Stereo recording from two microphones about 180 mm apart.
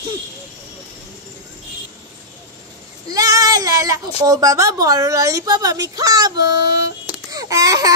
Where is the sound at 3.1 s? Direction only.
20° right (ahead or behind).